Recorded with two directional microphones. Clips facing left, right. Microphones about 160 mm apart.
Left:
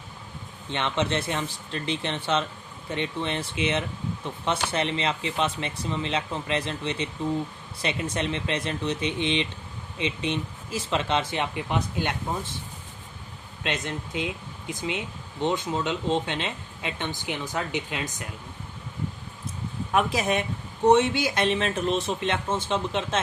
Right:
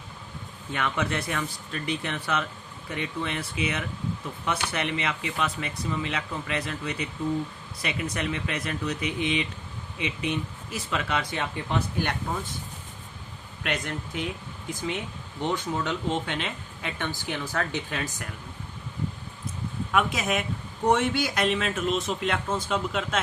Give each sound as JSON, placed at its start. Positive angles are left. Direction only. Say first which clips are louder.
{"t": 0.7, "sound": "speech", "louder": "left 2 dB", "side_deg": 25}
{"t": 13.6, "sound": "speech", "louder": "even", "side_deg": 20}
{"t": 19.9, "sound": "speech", "louder": "left 2 dB", "side_deg": 30}
{"t": 20.8, "sound": "speech", "louder": "left 4 dB", "side_deg": 20}